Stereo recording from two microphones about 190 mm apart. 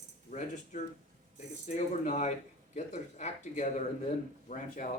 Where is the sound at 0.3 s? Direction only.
40° left (ahead or behind).